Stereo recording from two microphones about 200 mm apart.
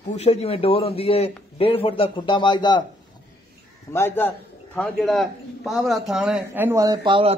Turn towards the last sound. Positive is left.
turn(degrees=-25)  # may be behind; listen again after turning